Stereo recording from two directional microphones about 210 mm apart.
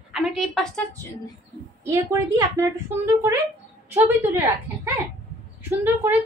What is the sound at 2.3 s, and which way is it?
Speech, 15° right (ahead or behind).